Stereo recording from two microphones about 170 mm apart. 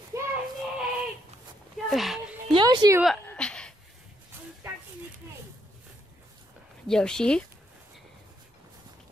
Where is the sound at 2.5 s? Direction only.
25° right (ahead or behind).